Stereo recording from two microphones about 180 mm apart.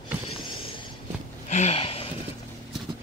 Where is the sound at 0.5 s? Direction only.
30° left (ahead or behind).